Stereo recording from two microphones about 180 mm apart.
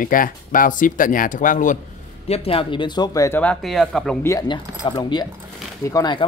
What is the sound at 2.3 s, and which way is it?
Speech, 30° left (ahead or behind).